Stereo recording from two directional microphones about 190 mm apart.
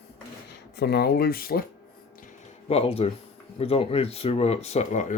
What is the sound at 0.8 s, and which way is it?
Speech, 60° left (ahead or behind).